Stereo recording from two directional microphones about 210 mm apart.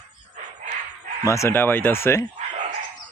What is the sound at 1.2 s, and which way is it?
Speech, 15° left (ahead or behind).